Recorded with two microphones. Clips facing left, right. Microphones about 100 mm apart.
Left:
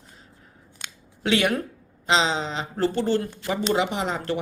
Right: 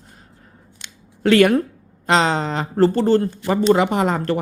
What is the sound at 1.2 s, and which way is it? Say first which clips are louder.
A woman's voice: right 9 dB; 50° right (ahead or behind).